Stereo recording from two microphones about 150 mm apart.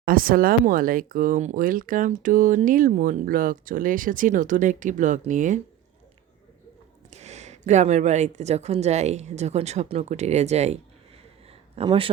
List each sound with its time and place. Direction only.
0.0 s speech: 70° right (ahead or behind)
7.1 s speech: 50° right (ahead or behind)
11.8 s speech: 35° right (ahead or behind)